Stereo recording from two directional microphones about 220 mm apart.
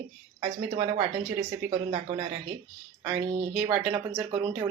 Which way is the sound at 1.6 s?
30° right (ahead or behind).